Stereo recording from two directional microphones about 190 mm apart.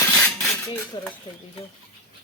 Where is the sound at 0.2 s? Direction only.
Centre (ahead or behind).